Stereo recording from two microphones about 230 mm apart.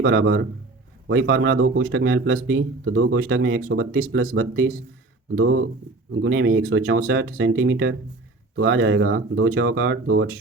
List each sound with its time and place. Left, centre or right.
0.0 s speech: right